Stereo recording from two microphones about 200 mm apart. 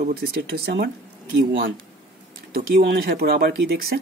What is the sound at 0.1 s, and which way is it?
Speech, 50° right (ahead or behind).